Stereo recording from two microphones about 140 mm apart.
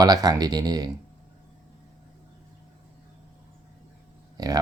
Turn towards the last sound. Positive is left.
turn(degrees=-25)  # may be behind; listen again after turning